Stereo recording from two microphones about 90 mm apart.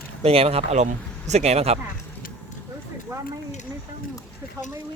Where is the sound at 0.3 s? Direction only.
90° right.